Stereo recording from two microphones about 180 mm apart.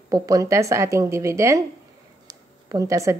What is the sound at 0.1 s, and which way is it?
A woman's voice, 20° right (ahead or behind).